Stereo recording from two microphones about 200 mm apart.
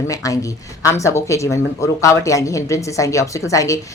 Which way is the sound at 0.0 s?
15° left (ahead or behind).